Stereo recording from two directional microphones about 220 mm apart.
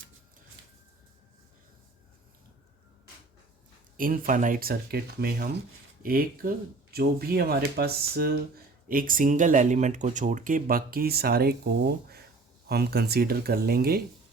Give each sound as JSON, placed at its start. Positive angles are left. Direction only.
{"t": 3.9, "sound": "speech", "side_deg": -40}